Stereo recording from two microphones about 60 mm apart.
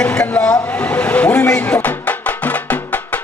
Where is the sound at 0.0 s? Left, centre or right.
Centre.